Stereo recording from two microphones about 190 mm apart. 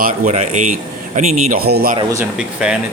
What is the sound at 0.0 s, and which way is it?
A man's voice, 40° right (ahead or behind).